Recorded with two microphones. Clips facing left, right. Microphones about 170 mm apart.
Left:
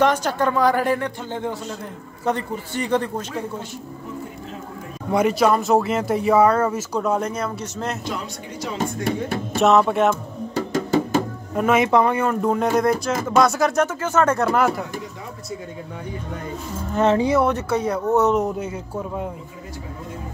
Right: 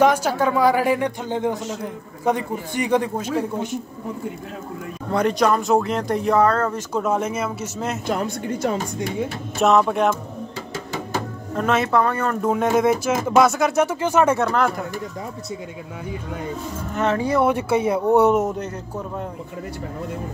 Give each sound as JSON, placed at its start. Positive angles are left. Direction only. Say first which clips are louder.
{"t": 0.0, "sound": "speech", "louder": "right 2 dB", "side_deg": -10}
{"t": 5.1, "sound": "speech", "louder": "left 1 dB", "side_deg": 5}
{"t": 6.9, "sound": "speech", "louder": "even", "side_deg": 0}
{"t": 8.1, "sound": "a woman's voice", "louder": "right 7 dB", "side_deg": -55}
{"t": 9.6, "sound": "speech", "louder": "left 1 dB", "side_deg": 0}
{"t": 11.5, "sound": "speech", "louder": "left 2 dB", "side_deg": 10}
{"t": 12.4, "sound": "speech", "louder": "even", "side_deg": 0}
{"t": 14.4, "sound": "speech", "louder": "left 1 dB", "side_deg": 5}
{"t": 16.9, "sound": "speech", "louder": "left 4 dB", "side_deg": 30}
{"t": 17.5, "sound": "speech", "louder": "right 2 dB", "side_deg": -10}